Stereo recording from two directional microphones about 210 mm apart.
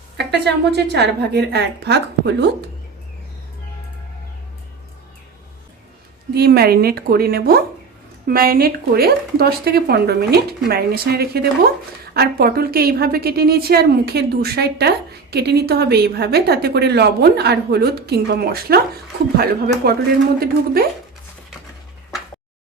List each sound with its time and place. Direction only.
0.2 s a woman's voice: 55° right (ahead or behind)
6.3 s a woman's voice: 50° right (ahead or behind)